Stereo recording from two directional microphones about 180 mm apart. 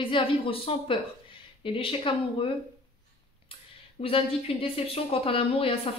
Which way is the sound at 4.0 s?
30° left (ahead or behind).